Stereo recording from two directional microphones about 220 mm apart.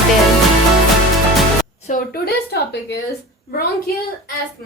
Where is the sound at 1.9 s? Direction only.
40° left (ahead or behind).